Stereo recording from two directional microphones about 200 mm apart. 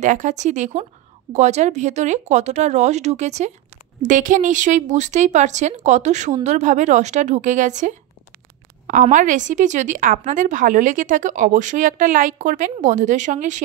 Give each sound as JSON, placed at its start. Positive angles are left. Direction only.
{"t": 0.0, "sound": "a woman's voice", "side_deg": -40}